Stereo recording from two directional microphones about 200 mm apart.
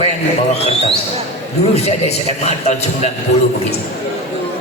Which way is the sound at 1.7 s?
30° left (ahead or behind).